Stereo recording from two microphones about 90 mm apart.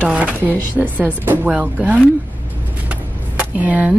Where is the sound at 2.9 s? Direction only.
15° right (ahead or behind).